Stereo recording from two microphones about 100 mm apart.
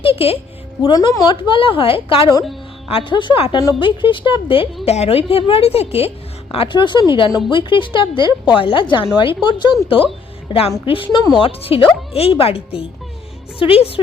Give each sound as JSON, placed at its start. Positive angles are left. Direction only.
{"t": 0.0, "sound": "speech", "side_deg": 70}
{"t": 0.8, "sound": "a woman's voice", "side_deg": 50}
{"t": 6.5, "sound": "a woman's voice", "side_deg": 60}
{"t": 10.5, "sound": "a woman's voice", "side_deg": 65}
{"t": 11.2, "sound": "speech", "side_deg": 45}
{"t": 11.4, "sound": "a woman's voice", "side_deg": 70}